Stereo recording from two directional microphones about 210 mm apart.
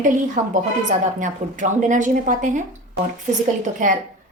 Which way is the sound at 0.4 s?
35° right (ahead or behind).